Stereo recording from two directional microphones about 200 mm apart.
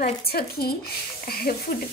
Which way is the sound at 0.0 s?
50° left (ahead or behind).